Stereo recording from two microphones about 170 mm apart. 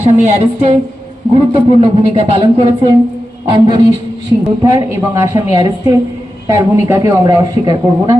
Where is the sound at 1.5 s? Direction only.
35° right (ahead or behind).